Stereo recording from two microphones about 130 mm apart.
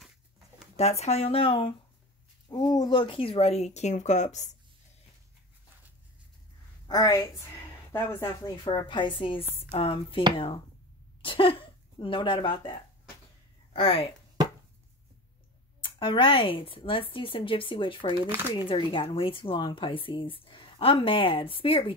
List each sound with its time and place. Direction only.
0.7 s a woman's voice: 55° left (ahead or behind)
2.4 s a woman's voice: 30° left (ahead or behind); by 4.5 s 65° left (ahead or behind)
6.9 s a woman's voice: 30° left (ahead or behind)
7.9 s speech: 15° left (ahead or behind)
8.6 s a woman's voice: 35° left (ahead or behind)
13.7 s a woman's voice: 45° left (ahead or behind)
15.8 s a woman's voice: 40° left (ahead or behind)